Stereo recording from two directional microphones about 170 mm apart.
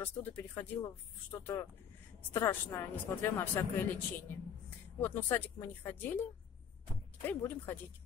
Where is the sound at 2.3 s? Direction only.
15° left (ahead or behind).